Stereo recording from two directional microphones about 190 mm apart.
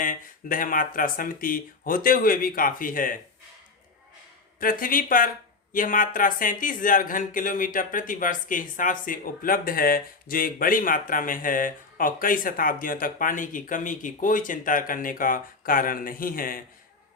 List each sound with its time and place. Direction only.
0.0 s speech: 45° left (ahead or behind)
4.6 s speech: 45° left (ahead or behind)